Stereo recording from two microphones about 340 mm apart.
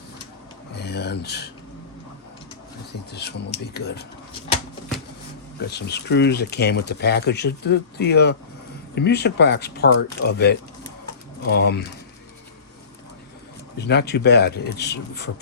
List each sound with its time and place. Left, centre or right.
0.8 s speech: left
3.1 s speech: left
5.5 s speech: left
13.7 s speech: left